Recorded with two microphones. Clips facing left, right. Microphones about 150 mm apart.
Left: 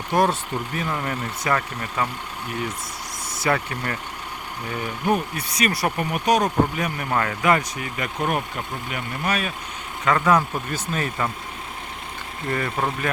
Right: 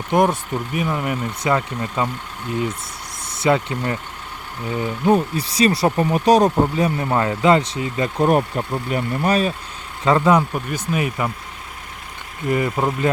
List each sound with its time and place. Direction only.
0.1 s speech: 15° right (ahead or behind)
3.4 s speech: 20° right (ahead or behind)
12.5 s speech: 20° right (ahead or behind)